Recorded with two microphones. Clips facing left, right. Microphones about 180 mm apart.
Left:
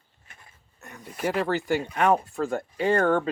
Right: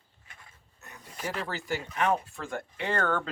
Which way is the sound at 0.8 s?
60° left (ahead or behind).